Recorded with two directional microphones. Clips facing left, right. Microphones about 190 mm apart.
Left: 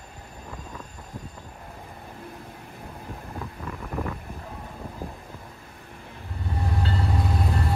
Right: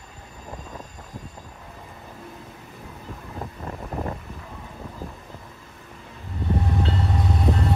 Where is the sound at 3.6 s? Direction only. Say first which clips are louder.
Right 1 dB; 30° right (ahead or behind).